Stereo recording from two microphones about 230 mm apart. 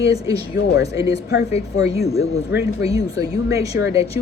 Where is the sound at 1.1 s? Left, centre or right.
Left.